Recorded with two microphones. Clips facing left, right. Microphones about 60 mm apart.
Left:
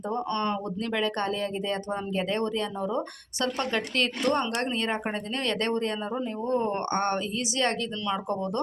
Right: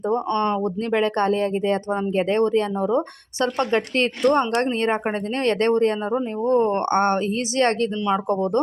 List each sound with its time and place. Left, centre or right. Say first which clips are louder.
0.1 s speech: right 6 dB; right